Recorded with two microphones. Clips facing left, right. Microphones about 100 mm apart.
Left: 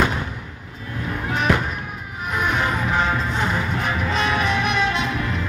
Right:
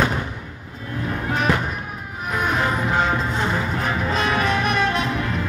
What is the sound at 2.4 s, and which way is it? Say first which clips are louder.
Music: right 1 dB; 35° right (ahead or behind).